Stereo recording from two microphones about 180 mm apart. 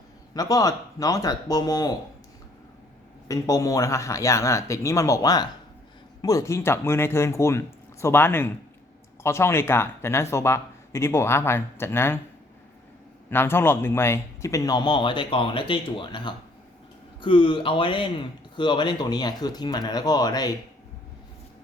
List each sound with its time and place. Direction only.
0.3 s speech: 20° left (ahead or behind)
3.2 s speech: 20° left (ahead or behind)
13.3 s speech: 15° left (ahead or behind)